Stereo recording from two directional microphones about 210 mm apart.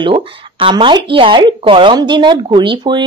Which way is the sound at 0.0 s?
25° right (ahead or behind).